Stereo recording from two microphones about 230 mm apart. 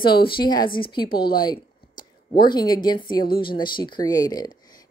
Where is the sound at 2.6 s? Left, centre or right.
Centre.